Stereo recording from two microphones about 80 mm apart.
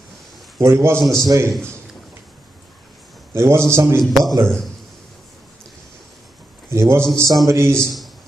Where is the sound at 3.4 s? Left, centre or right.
Right.